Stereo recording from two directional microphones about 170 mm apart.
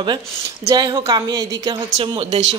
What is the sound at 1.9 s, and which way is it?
Speech, 35° right (ahead or behind).